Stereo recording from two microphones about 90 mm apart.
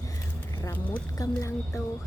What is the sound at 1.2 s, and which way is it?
Speech, 35° left (ahead or behind).